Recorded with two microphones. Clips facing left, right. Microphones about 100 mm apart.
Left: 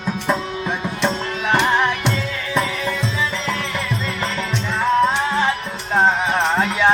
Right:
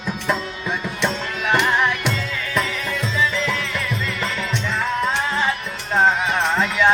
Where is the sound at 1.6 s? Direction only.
30° left (ahead or behind).